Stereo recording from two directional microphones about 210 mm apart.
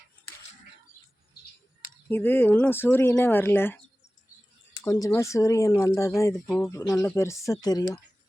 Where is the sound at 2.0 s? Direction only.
10° left (ahead or behind).